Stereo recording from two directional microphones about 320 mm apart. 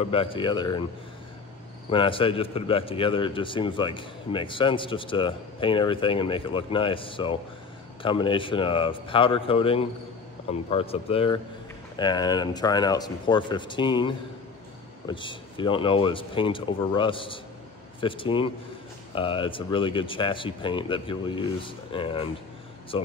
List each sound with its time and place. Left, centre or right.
0.0 s a man's voice: centre
1.9 s a man's voice: centre